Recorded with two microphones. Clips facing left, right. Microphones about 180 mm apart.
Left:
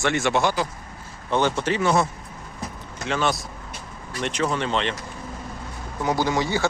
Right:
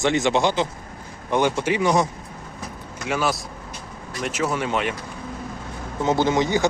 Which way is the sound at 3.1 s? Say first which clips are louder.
Even; 5° right (ahead or behind).